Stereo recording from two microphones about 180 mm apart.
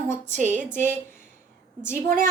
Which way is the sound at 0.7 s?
15° left (ahead or behind).